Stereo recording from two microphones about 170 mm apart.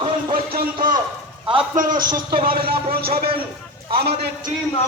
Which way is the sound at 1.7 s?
50° right (ahead or behind).